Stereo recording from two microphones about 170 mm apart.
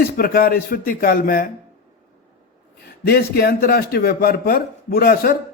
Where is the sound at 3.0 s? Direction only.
65° left (ahead or behind).